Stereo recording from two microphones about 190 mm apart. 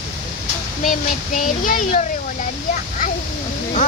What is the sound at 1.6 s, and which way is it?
Speech, 45° left (ahead or behind).